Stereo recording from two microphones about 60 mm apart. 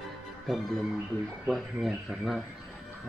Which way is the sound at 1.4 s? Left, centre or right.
Centre.